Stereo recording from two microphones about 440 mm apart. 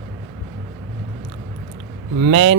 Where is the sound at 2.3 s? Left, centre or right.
Right.